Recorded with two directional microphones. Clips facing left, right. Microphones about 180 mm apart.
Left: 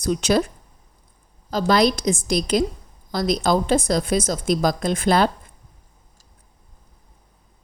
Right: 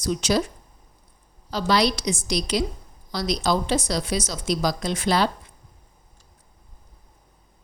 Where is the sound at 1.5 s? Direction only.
45° left (ahead or behind).